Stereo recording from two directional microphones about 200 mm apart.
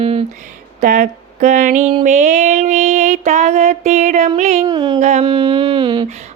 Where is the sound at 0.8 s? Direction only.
40° right (ahead or behind).